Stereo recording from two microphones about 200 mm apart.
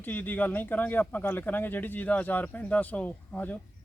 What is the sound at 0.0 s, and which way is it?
Speech, 10° left (ahead or behind).